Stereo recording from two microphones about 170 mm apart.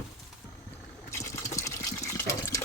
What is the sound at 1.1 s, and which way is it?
Water, 15° left (ahead or behind).